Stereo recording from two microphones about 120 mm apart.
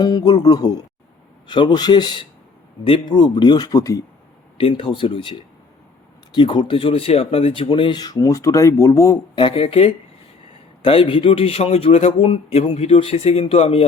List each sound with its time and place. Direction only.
0.0 s speech: 35° left (ahead or behind)
4.5 s speech: 45° left (ahead or behind); by 9.4 s 30° left (ahead or behind)
9.4 s speech: 45° left (ahead or behind)